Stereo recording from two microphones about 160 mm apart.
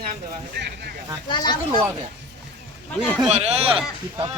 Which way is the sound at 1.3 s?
25° left (ahead or behind).